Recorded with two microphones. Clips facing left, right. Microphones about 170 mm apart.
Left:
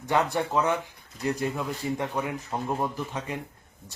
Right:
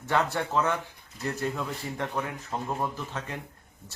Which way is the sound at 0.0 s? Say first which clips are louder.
Left 2 dB; 15° left (ahead or behind).